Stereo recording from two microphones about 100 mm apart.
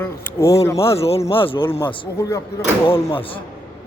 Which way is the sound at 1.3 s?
65° left (ahead or behind).